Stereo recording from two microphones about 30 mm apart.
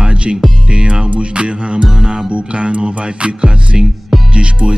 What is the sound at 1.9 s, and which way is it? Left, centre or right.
Music, right.